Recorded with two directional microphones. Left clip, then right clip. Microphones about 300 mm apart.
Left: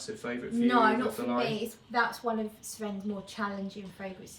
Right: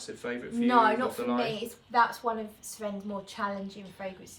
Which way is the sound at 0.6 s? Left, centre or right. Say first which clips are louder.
Right 2 dB; centre.